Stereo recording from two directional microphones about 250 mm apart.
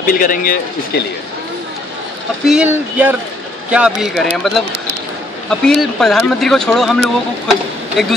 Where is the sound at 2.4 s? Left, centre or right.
Centre.